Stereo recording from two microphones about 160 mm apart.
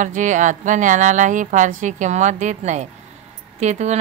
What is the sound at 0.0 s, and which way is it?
Speech, 50° right (ahead or behind).